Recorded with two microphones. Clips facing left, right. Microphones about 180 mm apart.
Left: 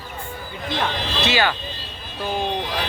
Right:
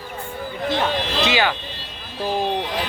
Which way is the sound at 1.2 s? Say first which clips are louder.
Left 1 dB; 15° right (ahead or behind).